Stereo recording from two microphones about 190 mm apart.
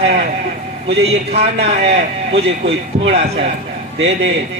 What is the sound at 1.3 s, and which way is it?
Speech, 35° right (ahead or behind).